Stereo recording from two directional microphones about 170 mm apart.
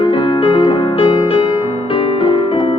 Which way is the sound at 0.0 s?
30° left (ahead or behind).